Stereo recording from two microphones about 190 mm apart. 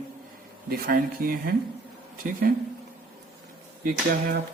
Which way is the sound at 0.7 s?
50° right (ahead or behind).